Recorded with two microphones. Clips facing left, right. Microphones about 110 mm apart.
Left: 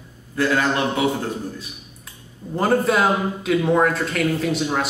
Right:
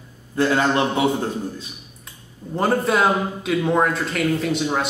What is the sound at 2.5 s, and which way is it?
A man's voice, centre (ahead or behind).